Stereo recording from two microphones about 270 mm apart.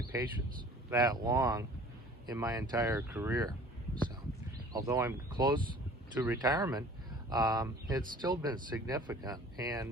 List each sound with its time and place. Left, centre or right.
0.1 s speech: centre
4.7 s speech: centre